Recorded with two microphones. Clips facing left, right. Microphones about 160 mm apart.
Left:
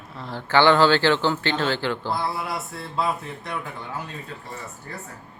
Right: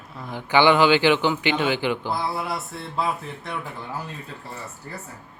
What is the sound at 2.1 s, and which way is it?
A man's voice, centre (ahead or behind).